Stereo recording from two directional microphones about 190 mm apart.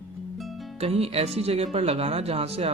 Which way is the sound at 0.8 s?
30° right (ahead or behind).